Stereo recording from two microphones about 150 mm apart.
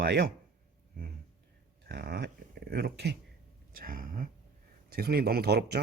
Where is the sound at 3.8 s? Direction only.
70° right (ahead or behind).